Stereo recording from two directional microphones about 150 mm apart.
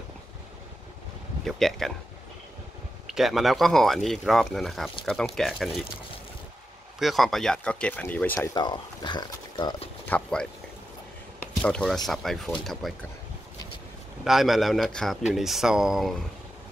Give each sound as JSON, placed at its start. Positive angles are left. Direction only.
{"t": 1.4, "sound": "a man's voice", "side_deg": 0}
{"t": 3.1, "sound": "a man's voice", "side_deg": 0}
{"t": 7.0, "sound": "a man's voice", "side_deg": 0}
{"t": 8.4, "sound": "speech", "side_deg": 30}
{"t": 10.0, "sound": "speech", "side_deg": 10}
{"t": 11.6, "sound": "a man's voice", "side_deg": 5}
{"t": 14.2, "sound": "a man's voice", "side_deg": 0}